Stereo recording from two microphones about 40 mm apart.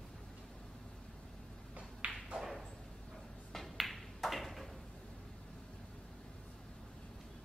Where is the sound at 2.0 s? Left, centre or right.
Right.